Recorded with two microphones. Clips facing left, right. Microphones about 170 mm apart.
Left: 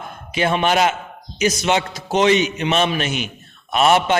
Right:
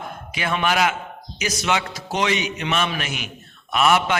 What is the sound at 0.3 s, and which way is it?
A man's voice, 25° left (ahead or behind).